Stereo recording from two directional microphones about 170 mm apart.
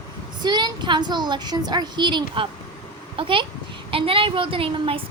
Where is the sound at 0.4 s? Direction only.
25° right (ahead or behind).